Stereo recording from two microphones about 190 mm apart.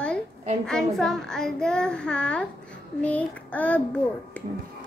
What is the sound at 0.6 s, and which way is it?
Child singing, 5° left (ahead or behind).